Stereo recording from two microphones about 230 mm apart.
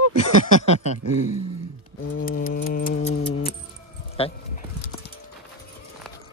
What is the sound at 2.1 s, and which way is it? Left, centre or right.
Keys jangling, left.